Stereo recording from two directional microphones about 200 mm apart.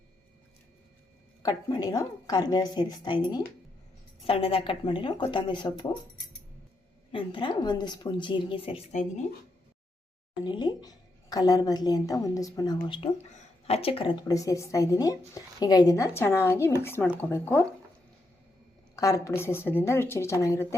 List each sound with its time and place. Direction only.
1.4 s speech: 20° left (ahead or behind)
7.1 s speech: 25° left (ahead or behind)
10.4 s speech: 20° left (ahead or behind)
18.9 s speech: 15° left (ahead or behind)